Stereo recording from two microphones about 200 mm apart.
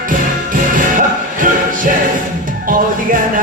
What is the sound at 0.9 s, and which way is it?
Music, 40° right (ahead or behind).